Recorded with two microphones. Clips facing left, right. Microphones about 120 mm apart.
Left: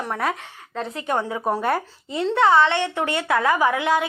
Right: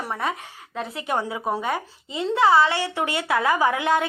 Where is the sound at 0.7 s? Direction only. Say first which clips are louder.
Left 2 dB; 15° right (ahead or behind).